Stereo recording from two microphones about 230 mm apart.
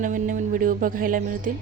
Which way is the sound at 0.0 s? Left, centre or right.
Right.